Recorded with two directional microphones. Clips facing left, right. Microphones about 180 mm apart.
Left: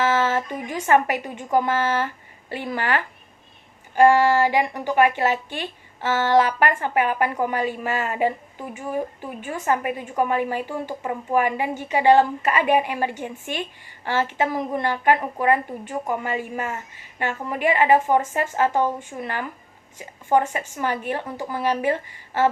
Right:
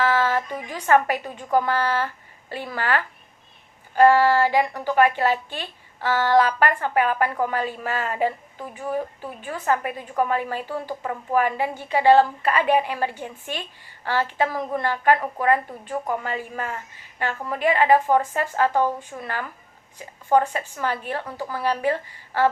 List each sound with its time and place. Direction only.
0.0 s a woman's voice: 20° left (ahead or behind)
4.0 s a woman's voice: 15° left (ahead or behind)
9.6 s a woman's voice: 15° left (ahead or behind)